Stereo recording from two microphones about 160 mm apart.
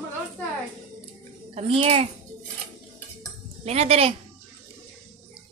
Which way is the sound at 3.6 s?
40° right (ahead or behind).